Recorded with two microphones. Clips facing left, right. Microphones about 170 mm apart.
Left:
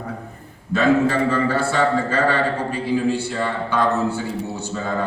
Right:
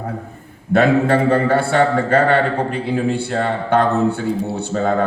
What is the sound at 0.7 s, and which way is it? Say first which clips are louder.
Speech: right 3 dB; 60° right (ahead or behind).